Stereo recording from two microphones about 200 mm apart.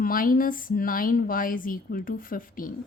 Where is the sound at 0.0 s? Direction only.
45° left (ahead or behind).